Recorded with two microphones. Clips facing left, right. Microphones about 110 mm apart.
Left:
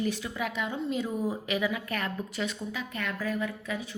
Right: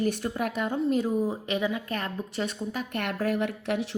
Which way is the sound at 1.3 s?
30° right (ahead or behind).